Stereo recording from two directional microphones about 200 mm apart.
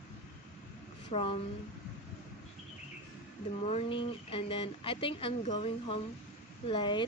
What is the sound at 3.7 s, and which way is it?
Speech, 25° left (ahead or behind).